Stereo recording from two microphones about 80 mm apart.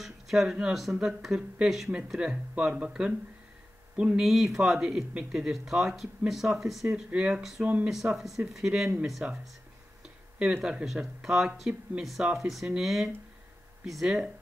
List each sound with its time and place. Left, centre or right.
0.0 s speech: centre
4.2 s speech: centre
7.9 s speech: centre